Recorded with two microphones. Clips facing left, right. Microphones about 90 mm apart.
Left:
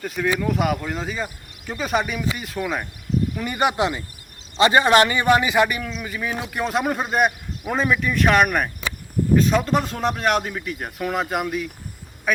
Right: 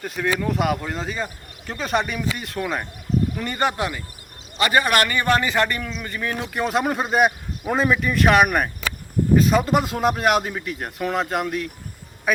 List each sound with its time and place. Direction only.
0.0 s a man's voice: centre (ahead or behind)